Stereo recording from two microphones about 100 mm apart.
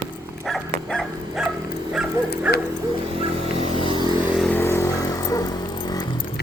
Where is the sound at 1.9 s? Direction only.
5° right (ahead or behind).